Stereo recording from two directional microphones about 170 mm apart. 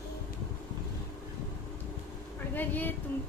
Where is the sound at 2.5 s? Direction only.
10° left (ahead or behind).